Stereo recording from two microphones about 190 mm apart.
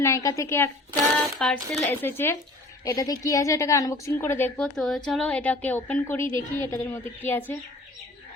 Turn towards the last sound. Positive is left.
turn(degrees=10)  # may be behind; listen again after turning